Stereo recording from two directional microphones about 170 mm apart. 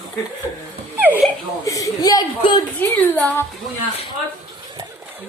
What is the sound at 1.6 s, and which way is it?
Speech, 20° left (ahead or behind).